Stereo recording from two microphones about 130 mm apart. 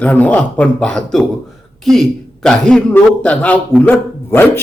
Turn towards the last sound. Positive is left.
turn(degrees=15)  # may be behind; listen again after turning